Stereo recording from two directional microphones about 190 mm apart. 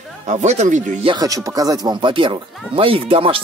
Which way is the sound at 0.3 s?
35° right (ahead or behind).